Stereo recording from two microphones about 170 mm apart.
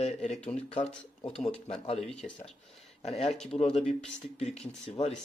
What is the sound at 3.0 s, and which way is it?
Speech, 40° left (ahead or behind).